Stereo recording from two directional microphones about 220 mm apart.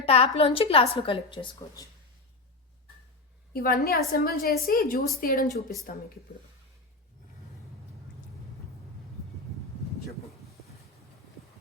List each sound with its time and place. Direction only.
0.0 s a woman's voice: 25° left (ahead or behind)
3.5 s a woman's voice: 40° left (ahead or behind)